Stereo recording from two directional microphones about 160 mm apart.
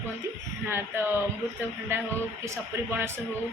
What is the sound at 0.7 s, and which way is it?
Speech, 15° right (ahead or behind).